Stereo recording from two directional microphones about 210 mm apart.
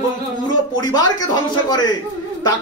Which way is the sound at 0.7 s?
20° left (ahead or behind).